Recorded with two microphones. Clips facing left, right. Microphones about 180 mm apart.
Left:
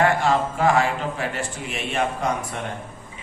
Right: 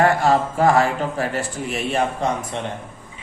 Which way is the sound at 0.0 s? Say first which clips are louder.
Right 3 dB; 40° right (ahead or behind).